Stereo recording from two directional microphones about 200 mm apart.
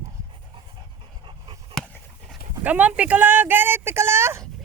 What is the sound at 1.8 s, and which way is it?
Speech, centre (ahead or behind).